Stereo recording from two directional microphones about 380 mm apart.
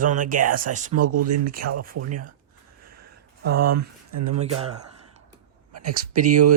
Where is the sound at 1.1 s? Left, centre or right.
Right.